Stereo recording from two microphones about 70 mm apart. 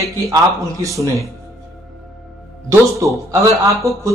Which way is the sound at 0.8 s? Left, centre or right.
Right.